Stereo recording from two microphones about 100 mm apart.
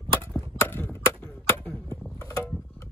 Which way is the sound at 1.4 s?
25° left (ahead or behind).